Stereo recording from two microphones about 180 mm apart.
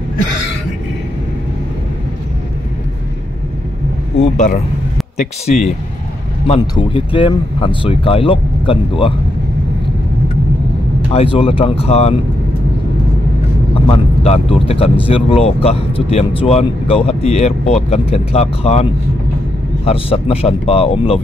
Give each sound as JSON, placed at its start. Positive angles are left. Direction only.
{"t": 4.2, "sound": "speech", "side_deg": 40}
{"t": 6.7, "sound": "speech", "side_deg": 30}
{"t": 11.1, "sound": "speech", "side_deg": 30}
{"t": 13.7, "sound": "speech", "side_deg": 35}